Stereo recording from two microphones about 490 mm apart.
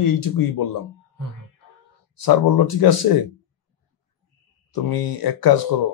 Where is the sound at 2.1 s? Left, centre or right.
Left.